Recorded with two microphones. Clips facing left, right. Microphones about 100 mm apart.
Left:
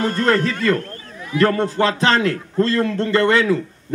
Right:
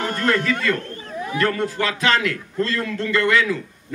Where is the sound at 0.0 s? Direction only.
35° left (ahead or behind).